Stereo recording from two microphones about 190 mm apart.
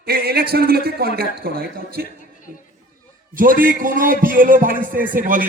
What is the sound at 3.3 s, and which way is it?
A man's voice, 45° right (ahead or behind).